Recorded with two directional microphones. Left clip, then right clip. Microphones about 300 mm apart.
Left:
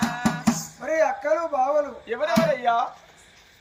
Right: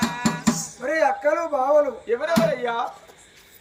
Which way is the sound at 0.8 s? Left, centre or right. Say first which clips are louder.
Right 2 dB; centre.